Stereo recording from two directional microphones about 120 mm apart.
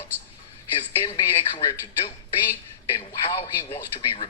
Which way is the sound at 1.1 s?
45° left (ahead or behind).